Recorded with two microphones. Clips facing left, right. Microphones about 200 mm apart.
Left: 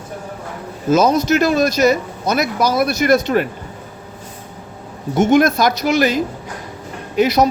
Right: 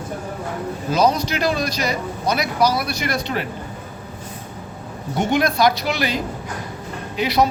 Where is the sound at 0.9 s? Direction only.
45° left (ahead or behind).